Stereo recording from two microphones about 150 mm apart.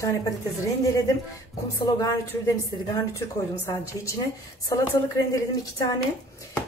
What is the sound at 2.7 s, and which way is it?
Speech, 20° left (ahead or behind).